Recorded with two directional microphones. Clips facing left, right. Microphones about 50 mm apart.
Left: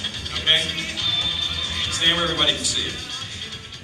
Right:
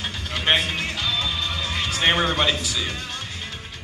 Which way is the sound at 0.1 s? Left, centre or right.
Right.